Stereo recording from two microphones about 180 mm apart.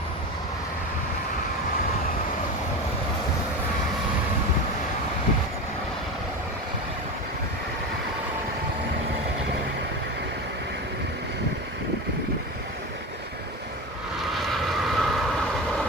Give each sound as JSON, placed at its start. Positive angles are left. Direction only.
{"t": 14.2, "sound": "vehicle", "side_deg": 0}